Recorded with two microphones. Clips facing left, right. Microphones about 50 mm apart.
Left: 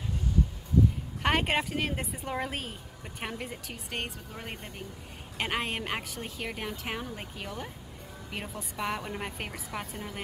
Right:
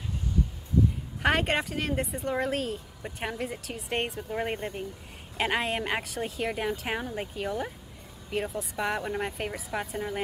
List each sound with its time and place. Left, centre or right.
1.2 s speech: centre
3.9 s speech: centre
5.4 s speech: centre